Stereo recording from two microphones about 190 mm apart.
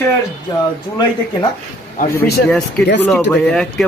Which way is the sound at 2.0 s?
50° left (ahead or behind).